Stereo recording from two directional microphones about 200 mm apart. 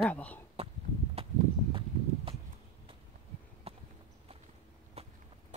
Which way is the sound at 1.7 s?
25° right (ahead or behind).